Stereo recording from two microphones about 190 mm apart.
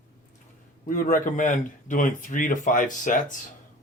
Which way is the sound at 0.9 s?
45° left (ahead or behind).